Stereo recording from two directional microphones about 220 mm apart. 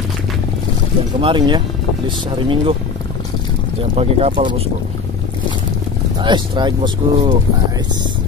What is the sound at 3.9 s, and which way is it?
Speech, 25° right (ahead or behind).